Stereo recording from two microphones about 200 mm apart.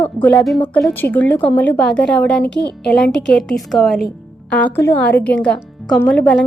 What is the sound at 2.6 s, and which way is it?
Speech, 55° left (ahead or behind).